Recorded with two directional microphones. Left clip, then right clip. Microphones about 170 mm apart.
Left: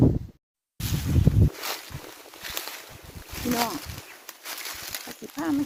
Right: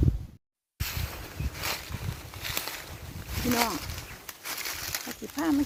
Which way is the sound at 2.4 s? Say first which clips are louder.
Right 1 dB; centre (ahead or behind).